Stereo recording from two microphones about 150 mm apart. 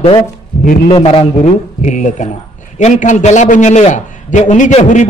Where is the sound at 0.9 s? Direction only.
40° left (ahead or behind).